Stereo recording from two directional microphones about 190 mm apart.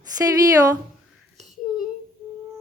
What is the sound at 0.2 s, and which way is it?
Speech, 20° right (ahead or behind).